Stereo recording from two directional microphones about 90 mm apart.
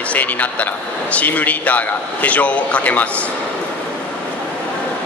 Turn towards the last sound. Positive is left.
turn(degrees=15)  # may be behind; listen again after turning